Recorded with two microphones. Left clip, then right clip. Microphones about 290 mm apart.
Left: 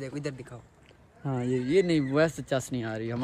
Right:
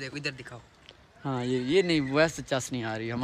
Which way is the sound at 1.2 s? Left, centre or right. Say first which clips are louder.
Even; right.